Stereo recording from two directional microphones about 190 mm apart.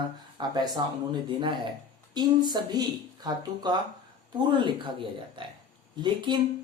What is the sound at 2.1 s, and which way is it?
Speech, 20° right (ahead or behind).